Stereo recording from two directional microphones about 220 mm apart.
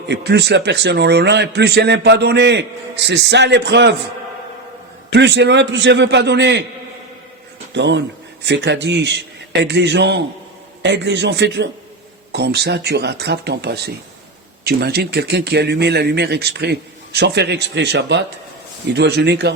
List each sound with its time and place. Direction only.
0.1 s a man's voice: 50° right (ahead or behind)
5.1 s a man's voice: 50° right (ahead or behind)
7.7 s a man's voice: 55° right (ahead or behind)